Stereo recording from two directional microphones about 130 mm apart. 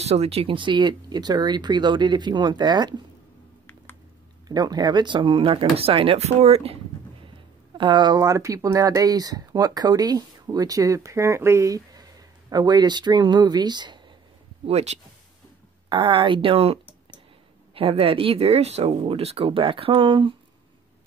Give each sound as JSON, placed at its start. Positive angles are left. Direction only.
{"t": 0.0, "sound": "speech", "side_deg": -55}
{"t": 4.5, "sound": "speech", "side_deg": -30}
{"t": 7.7, "sound": "speech", "side_deg": -35}
{"t": 14.7, "sound": "speech", "side_deg": -55}
{"t": 15.9, "sound": "speech", "side_deg": -40}